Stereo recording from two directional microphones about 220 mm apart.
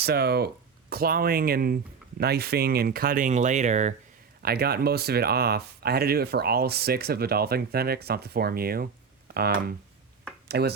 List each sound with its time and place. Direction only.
0.0 s speech: 45° right (ahead or behind)
4.4 s speech: 45° right (ahead or behind)